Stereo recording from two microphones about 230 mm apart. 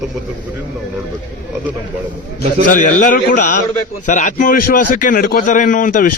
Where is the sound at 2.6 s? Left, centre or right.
Left.